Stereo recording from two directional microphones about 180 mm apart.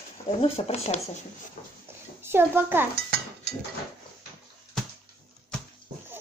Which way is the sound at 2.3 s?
10° right (ahead or behind).